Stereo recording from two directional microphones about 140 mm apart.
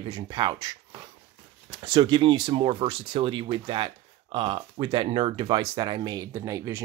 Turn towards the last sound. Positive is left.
turn(degrees=-25)  # may be behind; listen again after turning